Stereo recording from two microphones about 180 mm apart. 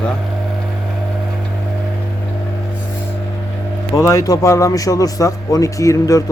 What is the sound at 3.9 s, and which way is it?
Speech, 15° left (ahead or behind).